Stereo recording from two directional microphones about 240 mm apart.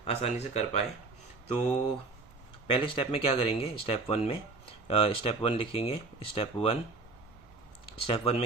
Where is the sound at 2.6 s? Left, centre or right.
Left.